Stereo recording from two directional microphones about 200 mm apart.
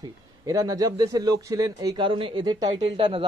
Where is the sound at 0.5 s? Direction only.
15° right (ahead or behind).